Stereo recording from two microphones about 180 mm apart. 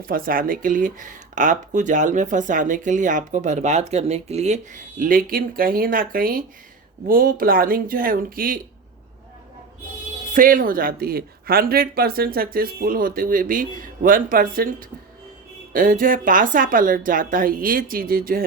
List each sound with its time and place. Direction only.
0.0 s speech: 50° right (ahead or behind)
10.3 s speech: 50° right (ahead or behind)